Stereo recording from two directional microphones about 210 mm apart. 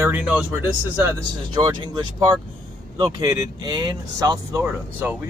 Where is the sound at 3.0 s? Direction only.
15° right (ahead or behind).